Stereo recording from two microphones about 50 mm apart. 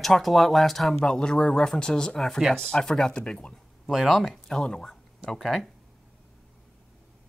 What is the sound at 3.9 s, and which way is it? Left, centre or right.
Speech, centre.